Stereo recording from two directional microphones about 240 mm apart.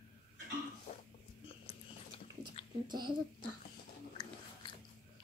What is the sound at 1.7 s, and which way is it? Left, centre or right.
Biting, left.